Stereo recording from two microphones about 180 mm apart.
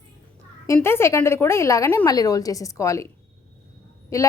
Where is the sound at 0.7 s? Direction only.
15° left (ahead or behind).